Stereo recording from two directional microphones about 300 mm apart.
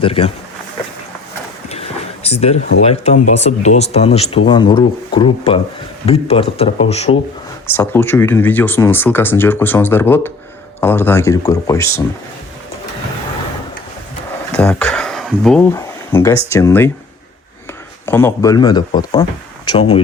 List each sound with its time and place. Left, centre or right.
0.0 s speech: centre
1.7 s a sound: centre
2.8 s speech: left
7.7 s speech: centre
14.5 s speech: centre
18.0 s speech: centre